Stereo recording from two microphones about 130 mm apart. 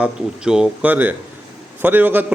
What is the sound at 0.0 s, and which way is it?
A man's voice, 5° right (ahead or behind).